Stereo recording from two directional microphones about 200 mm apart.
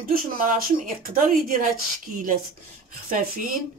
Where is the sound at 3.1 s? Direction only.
45° right (ahead or behind).